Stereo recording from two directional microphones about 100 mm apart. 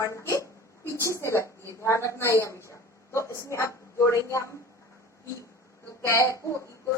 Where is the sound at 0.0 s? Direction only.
30° left (ahead or behind).